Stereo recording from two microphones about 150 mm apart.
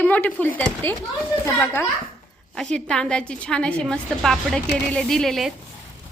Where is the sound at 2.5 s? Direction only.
5° left (ahead or behind).